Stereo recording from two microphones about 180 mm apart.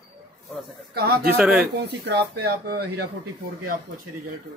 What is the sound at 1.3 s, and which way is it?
Speech, 10° right (ahead or behind).